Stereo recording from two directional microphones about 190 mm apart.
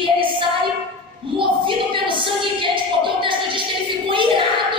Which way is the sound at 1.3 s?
25° right (ahead or behind).